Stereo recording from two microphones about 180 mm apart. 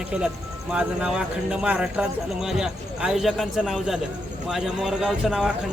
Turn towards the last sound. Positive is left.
turn(degrees=-5)  # may be behind; listen again after turning